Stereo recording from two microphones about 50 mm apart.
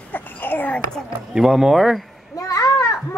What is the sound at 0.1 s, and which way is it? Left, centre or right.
Babbling, left.